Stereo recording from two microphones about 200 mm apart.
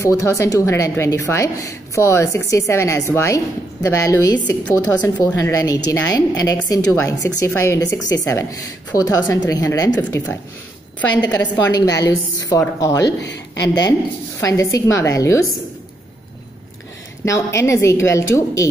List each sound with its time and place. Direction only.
0.0 s a woman's voice: 15° left (ahead or behind)
11.5 s a woman's voice: 20° left (ahead or behind)
14.4 s a woman's voice: 15° left (ahead or behind)
17.2 s a woman's voice: 15° left (ahead or behind)